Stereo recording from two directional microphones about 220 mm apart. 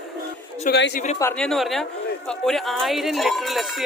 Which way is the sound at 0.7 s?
50° left (ahead or behind).